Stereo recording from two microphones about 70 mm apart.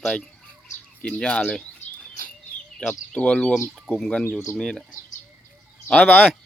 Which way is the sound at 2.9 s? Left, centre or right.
Centre.